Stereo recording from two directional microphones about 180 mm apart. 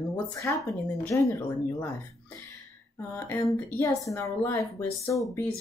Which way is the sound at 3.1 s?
15° left (ahead or behind).